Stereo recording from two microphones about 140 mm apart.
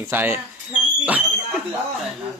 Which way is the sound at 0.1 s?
15° right (ahead or behind).